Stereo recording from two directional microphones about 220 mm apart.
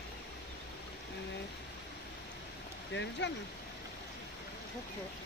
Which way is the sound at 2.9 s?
55° left (ahead or behind).